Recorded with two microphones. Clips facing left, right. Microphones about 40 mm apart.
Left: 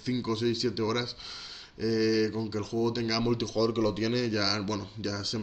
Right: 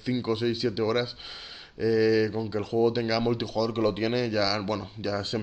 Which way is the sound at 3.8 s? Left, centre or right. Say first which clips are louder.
Right 2 dB; right.